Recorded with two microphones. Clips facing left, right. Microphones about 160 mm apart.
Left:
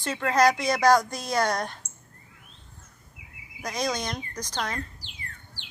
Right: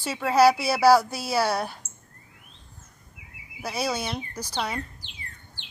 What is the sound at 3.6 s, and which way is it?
Speech, 10° right (ahead or behind).